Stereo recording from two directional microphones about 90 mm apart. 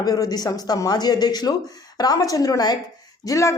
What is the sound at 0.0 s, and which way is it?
A woman's voice, 45° left (ahead or behind).